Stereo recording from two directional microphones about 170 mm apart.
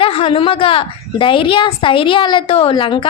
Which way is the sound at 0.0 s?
35° left (ahead or behind).